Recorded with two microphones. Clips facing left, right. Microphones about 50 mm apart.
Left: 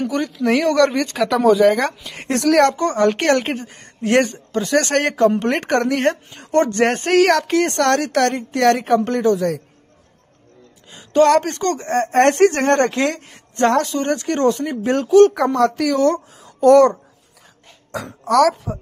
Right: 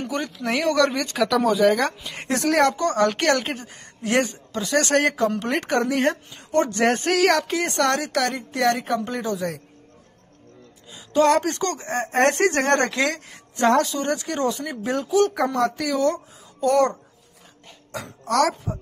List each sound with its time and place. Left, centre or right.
0.0 s speech: centre
2.3 s speech: left
2.7 s speech: left
6.7 s speech: left
7.3 s a woman's voice: left
10.9 s a sound: left
11.4 s speech: left
12.8 s speech: left
15.3 s speech: left
18.0 s speech: left